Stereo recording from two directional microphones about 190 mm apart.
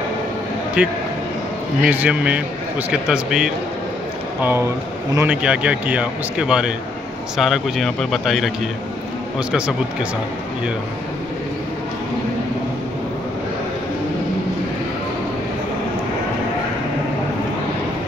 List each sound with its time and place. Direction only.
0.8 s a man's voice: 5° right (ahead or behind)